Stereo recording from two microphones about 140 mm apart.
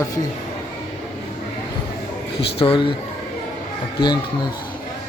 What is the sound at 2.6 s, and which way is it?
Speech, 40° left (ahead or behind).